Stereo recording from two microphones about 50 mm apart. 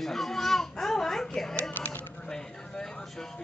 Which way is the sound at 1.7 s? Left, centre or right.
Left.